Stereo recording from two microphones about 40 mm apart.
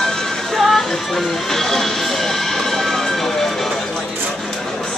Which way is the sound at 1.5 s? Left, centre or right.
Centre.